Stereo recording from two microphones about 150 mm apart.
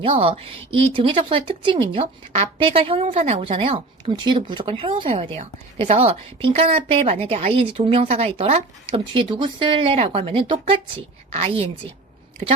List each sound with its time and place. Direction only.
0.0 s a woman's voice: 40° right (ahead or behind)